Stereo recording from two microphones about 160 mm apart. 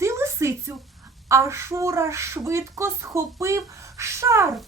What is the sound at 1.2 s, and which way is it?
A woman's voice, 20° right (ahead or behind).